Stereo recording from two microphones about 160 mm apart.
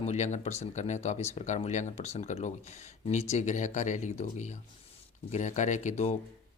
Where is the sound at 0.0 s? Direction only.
45° left (ahead or behind).